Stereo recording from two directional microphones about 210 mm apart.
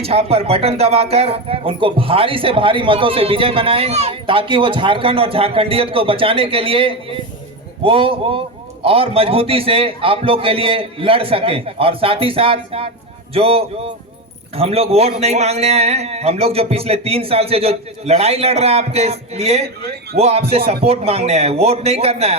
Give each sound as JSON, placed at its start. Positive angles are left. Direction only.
{"t": 0.0, "sound": "speech", "side_deg": -30}